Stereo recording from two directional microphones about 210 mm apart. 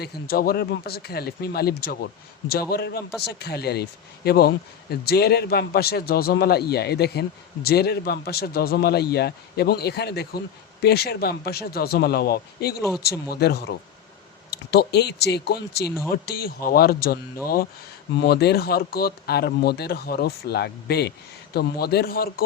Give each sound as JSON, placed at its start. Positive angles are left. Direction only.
{"t": 0.0, "sound": "speech", "side_deg": 45}